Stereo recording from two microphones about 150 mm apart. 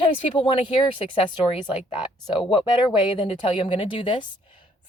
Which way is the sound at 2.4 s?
35° left (ahead or behind).